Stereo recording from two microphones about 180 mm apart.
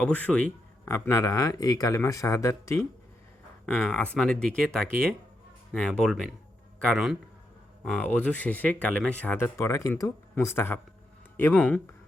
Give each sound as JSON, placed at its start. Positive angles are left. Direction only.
{"t": 0.0, "sound": "speech", "side_deg": 10}
{"t": 7.9, "sound": "speech", "side_deg": 10}